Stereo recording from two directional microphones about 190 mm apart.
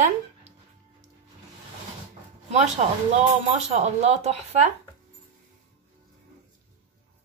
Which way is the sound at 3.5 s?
35° right (ahead or behind).